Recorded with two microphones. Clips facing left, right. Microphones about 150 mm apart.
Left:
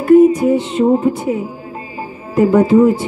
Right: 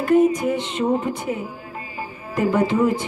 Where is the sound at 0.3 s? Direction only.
30° left (ahead or behind).